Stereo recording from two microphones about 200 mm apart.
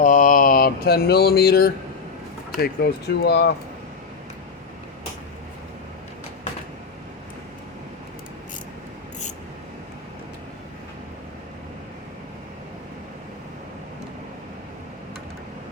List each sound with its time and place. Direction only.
0.0 s mantra: 40° left (ahead or behind)
2.6 s speech: 55° left (ahead or behind)